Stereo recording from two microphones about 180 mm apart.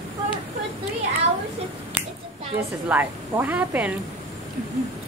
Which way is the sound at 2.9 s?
10° right (ahead or behind).